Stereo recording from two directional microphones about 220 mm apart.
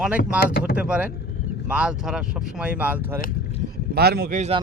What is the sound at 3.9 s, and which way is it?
Speech, 45° right (ahead or behind).